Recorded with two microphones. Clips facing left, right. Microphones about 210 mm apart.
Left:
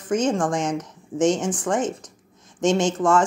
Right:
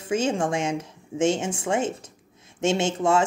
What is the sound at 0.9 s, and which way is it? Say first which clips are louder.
Speech: left 4 dB; 25° right (ahead or behind).